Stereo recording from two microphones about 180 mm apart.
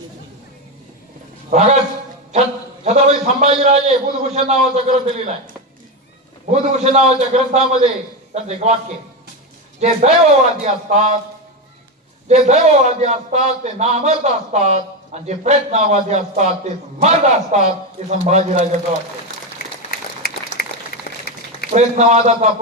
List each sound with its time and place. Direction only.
1.5 s a man's voice: 40° right (ahead or behind)
2.8 s a man's voice: 40° right (ahead or behind)
6.5 s a man's voice: 40° right (ahead or behind)
9.8 s a man's voice: 40° right (ahead or behind)
12.3 s a man's voice: 40° right (ahead or behind)
19.9 s applause: 55° left (ahead or behind)
21.1 s a sound: 55° left (ahead or behind)
21.7 s a man's voice: 40° right (ahead or behind)